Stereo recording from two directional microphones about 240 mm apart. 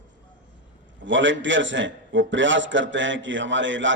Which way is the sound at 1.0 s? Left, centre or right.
Right.